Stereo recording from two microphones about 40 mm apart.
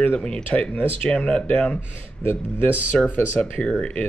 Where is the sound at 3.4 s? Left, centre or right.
Left.